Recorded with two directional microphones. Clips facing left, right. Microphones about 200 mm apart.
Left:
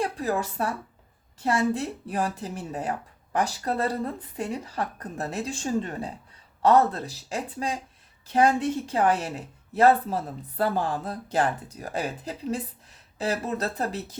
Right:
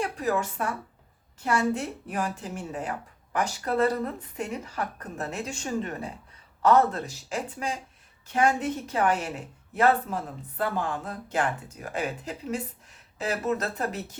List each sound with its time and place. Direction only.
0.0 s speech: 35° left (ahead or behind)